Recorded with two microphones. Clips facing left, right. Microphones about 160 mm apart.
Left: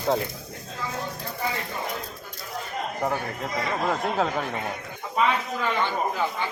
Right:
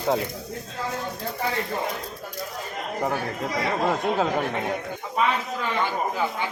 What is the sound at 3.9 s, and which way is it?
Speech, centre (ahead or behind).